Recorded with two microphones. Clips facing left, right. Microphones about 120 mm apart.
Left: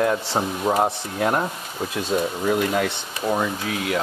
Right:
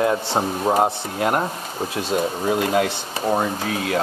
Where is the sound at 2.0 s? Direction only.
30° right (ahead or behind).